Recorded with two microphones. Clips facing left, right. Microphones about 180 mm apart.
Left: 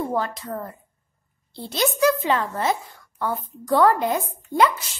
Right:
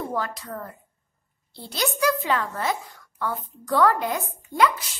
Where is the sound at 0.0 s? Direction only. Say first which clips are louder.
Left 4 dB; 25° left (ahead or behind).